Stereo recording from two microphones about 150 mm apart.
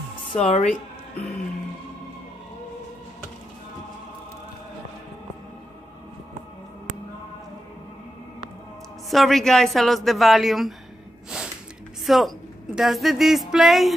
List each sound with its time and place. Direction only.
0.3 s a woman's voice: 45° left (ahead or behind)
9.1 s a woman's voice: centre (ahead or behind)
11.3 s snort: 5° right (ahead or behind)
12.1 s a woman's voice: centre (ahead or behind)